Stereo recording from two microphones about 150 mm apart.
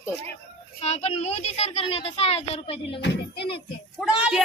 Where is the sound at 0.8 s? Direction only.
45° left (ahead or behind).